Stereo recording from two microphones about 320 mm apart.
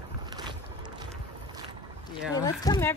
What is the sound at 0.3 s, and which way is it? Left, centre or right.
Boat, centre.